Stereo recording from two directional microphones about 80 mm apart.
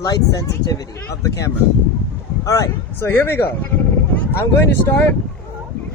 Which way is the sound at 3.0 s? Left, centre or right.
Left.